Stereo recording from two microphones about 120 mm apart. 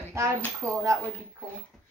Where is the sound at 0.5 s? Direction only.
25° right (ahead or behind).